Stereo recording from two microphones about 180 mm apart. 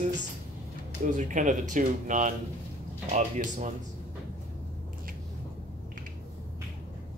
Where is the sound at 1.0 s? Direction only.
45° right (ahead or behind).